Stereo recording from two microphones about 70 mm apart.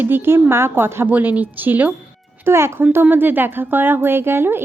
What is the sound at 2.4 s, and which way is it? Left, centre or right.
Speech, right.